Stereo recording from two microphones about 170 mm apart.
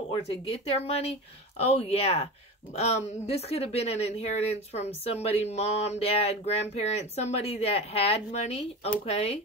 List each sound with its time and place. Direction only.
0.1 s a woman's voice: 35° left (ahead or behind)